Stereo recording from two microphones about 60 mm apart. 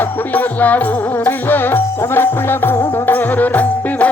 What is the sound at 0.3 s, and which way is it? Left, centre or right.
Music, left.